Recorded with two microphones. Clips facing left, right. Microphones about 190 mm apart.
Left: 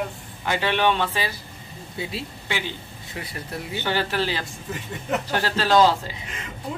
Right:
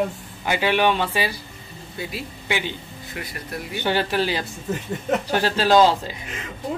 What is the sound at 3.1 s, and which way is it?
Speech, 30° left (ahead or behind).